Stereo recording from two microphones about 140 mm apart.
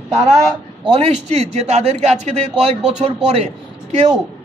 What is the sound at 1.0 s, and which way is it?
A man's voice, 50° right (ahead or behind).